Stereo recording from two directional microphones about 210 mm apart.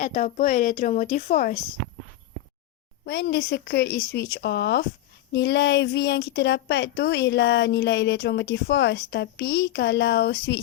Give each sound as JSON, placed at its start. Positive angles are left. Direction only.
{"t": 0.0, "sound": "speech", "side_deg": 35}
{"t": 3.0, "sound": "a woman's voice", "side_deg": 50}